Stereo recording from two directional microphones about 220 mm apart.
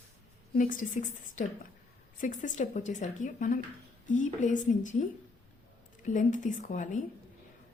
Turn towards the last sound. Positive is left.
turn(degrees=35)  # may be behind; listen again after turning